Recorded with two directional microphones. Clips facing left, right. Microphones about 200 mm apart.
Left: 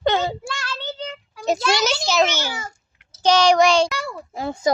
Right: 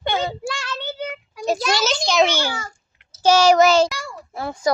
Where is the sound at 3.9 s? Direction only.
60° left (ahead or behind).